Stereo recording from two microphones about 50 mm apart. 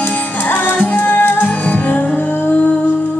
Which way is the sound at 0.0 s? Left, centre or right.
Left.